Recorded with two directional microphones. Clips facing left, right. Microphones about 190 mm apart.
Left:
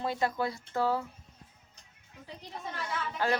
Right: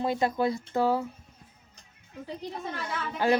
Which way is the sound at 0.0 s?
15° right (ahead or behind).